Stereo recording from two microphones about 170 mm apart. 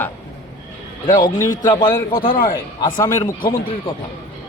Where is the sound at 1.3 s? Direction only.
20° left (ahead or behind).